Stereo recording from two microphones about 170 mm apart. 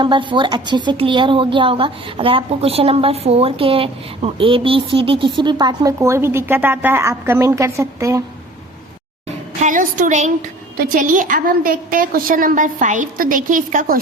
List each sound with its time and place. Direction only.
0.0 s a woman's voice: 30° right (ahead or behind)
9.6 s a sound: 45° right (ahead or behind)
10.8 s a woman's voice: 50° right (ahead or behind)